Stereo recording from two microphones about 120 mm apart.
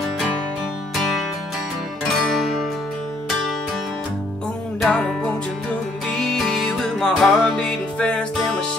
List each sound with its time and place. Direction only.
2.1 s music: centre (ahead or behind)
4.7 s music: 5° left (ahead or behind)